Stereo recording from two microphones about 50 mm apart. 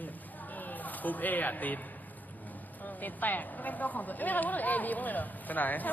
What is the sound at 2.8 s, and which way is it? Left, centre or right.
Speech, left.